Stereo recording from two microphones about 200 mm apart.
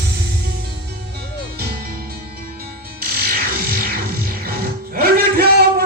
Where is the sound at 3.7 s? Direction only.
50° right (ahead or behind).